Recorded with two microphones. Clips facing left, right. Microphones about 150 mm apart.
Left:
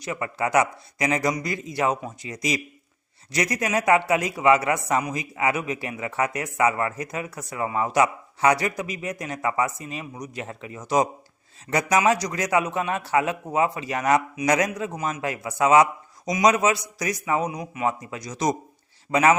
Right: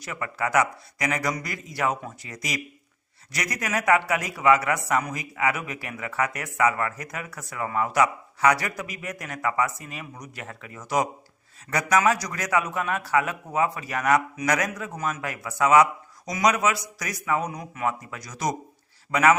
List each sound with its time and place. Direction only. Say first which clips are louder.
0.0 s a man's voice: left 3 dB; 20° left (ahead or behind)